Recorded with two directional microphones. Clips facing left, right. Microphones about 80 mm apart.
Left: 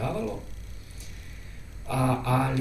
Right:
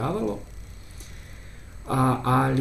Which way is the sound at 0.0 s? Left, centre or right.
Right.